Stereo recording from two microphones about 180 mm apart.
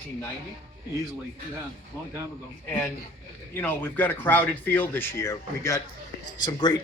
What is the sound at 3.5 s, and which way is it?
Speech, 10° left (ahead or behind).